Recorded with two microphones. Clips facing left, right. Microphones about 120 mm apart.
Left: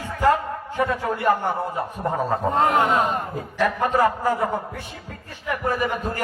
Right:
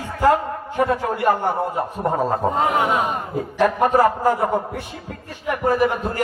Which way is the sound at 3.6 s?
30° right (ahead or behind).